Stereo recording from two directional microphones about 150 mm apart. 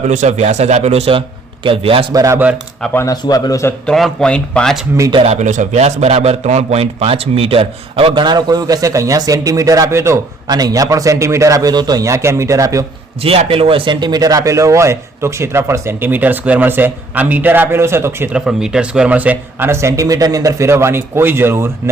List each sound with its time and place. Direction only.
0.0 s a man's voice: 50° right (ahead or behind)
2.1 s a man's voice: 20° right (ahead or behind)
2.8 s speech: 15° left (ahead or behind)
3.1 s a man's voice: 25° left (ahead or behind)
3.8 s speech: 5° left (ahead or behind)
5.1 s a man's voice: 45° right (ahead or behind); by 12.8 s 20° right (ahead or behind)
13.2 s speech: 40° right (ahead or behind); by 21.7 s 15° right (ahead or behind)